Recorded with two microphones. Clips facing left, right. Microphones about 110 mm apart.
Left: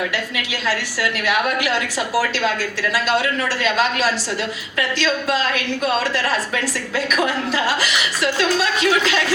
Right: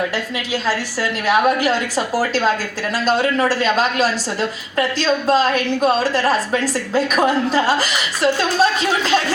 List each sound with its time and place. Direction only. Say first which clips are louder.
1.3 s a woman's voice: right 6 dB; 40° right (ahead or behind)